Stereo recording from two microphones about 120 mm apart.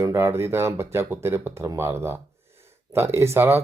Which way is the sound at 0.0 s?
25° right (ahead or behind).